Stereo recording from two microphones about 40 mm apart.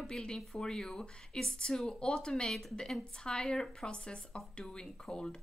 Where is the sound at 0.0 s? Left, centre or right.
Centre.